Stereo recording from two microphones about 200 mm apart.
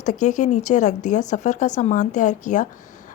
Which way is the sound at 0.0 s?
40° left (ahead or behind).